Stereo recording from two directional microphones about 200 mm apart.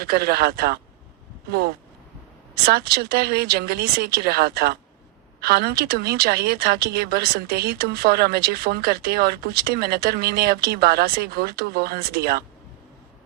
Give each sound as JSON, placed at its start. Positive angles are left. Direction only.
{"t": 0.0, "sound": "a woman's voice", "side_deg": -50}